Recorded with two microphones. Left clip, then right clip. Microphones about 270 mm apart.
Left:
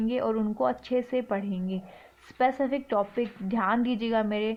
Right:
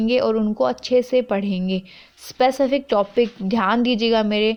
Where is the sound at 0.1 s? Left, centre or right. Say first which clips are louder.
Right 11 dB; right.